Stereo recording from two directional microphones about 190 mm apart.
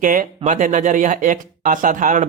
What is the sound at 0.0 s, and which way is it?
Speech, 45° right (ahead or behind).